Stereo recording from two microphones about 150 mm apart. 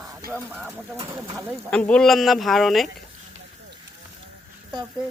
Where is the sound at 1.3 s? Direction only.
15° right (ahead or behind).